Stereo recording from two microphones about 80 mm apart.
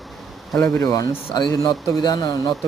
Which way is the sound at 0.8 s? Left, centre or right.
Left.